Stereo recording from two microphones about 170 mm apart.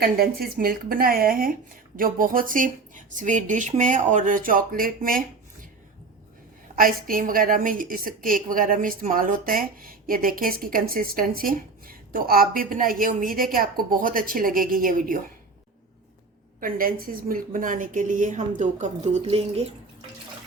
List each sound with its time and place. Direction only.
0.0 s a woman's voice: 65° right (ahead or behind)
6.7 s a woman's voice: 55° right (ahead or behind)
16.6 s speech: 55° right (ahead or behind); by 19.7 s 35° right (ahead or behind)